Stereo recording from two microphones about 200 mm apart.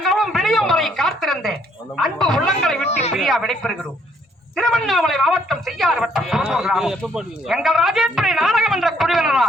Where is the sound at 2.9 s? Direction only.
30° left (ahead or behind).